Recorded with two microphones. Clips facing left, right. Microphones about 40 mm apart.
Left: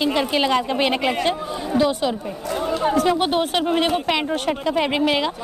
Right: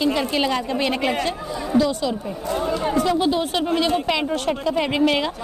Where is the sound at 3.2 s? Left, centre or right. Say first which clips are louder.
Left 1 dB; left.